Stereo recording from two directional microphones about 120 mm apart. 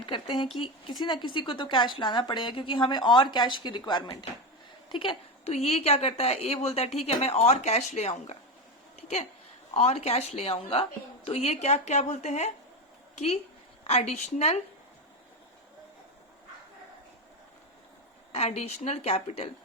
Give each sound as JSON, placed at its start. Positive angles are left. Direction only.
{"t": 0.0, "sound": "a sound", "side_deg": 45}
{"t": 0.5, "sound": "a woman's voice", "side_deg": 45}
{"t": 5.5, "sound": "a woman's voice", "side_deg": 60}
{"t": 9.0, "sound": "a sound", "side_deg": 65}
{"t": 9.7, "sound": "a woman's voice", "side_deg": 65}
{"t": 18.3, "sound": "a woman's voice", "side_deg": 60}